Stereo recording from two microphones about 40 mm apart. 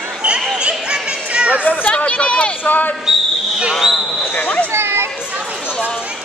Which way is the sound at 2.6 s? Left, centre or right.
Left.